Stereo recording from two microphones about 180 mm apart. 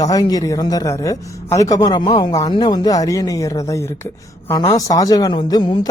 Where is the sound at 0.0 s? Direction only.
20° left (ahead or behind).